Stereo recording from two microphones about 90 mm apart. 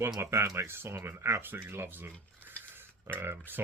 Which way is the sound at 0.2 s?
30° right (ahead or behind).